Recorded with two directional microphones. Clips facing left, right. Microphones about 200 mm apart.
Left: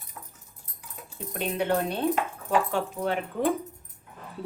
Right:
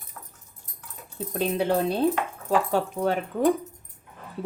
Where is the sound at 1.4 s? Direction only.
35° right (ahead or behind).